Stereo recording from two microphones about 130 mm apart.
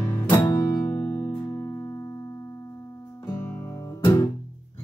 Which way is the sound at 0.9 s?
20° left (ahead or behind).